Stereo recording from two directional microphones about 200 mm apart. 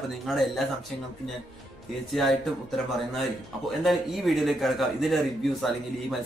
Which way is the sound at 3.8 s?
Centre (ahead or behind).